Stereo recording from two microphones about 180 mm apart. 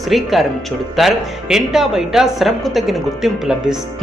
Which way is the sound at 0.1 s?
Centre (ahead or behind).